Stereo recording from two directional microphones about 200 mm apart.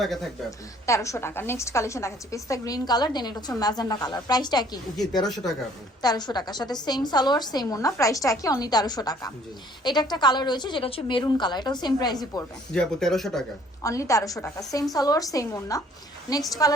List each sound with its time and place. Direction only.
0.0 s speech: centre (ahead or behind)
0.9 s a woman's voice: 15° left (ahead or behind)
5.2 s speech: centre (ahead or behind)
6.0 s a woman's voice: 20° left (ahead or behind)
12.7 s speech: 5° left (ahead or behind)
13.8 s a woman's voice: 15° left (ahead or behind)